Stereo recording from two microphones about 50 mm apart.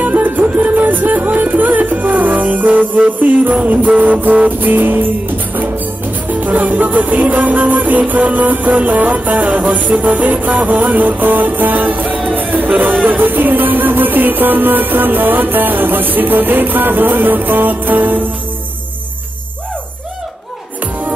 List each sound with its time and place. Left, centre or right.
0.0 s music: right
4.5 s music: right